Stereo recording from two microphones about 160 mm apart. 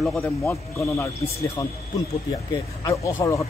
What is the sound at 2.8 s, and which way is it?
Speech, 20° left (ahead or behind).